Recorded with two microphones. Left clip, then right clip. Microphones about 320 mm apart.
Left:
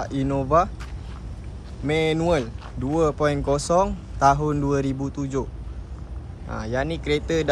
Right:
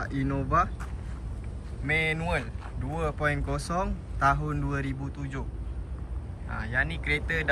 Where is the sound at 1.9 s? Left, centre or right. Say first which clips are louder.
Left 6 dB; centre.